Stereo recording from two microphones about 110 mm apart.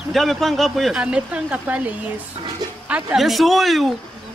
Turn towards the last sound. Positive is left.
turn(degrees=0)  # may be behind; listen again after turning